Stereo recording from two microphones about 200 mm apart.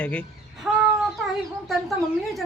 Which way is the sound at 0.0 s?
5° left (ahead or behind).